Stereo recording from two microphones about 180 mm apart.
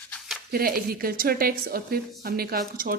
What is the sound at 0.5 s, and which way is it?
A woman's voice, 55° right (ahead or behind).